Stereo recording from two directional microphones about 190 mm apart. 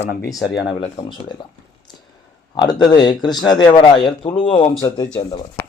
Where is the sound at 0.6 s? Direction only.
25° left (ahead or behind).